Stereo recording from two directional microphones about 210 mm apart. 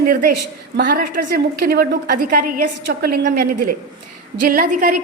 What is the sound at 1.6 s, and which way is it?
A woman's voice, 45° right (ahead or behind).